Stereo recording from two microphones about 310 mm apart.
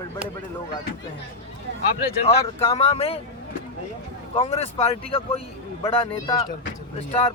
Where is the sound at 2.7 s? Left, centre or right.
Centre.